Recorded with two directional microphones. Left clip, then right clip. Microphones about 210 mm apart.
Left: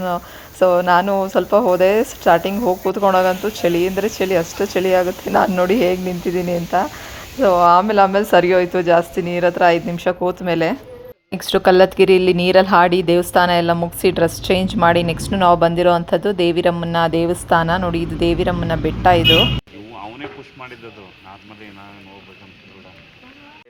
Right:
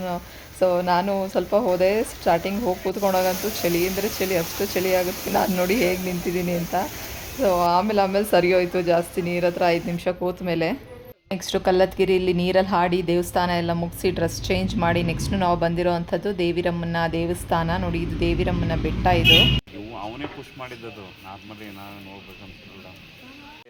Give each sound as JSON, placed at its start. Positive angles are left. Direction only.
{"t": 0.6, "sound": "a woman's voice", "side_deg": 15}